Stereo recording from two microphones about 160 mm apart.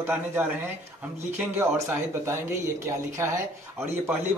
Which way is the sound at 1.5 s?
15° right (ahead or behind).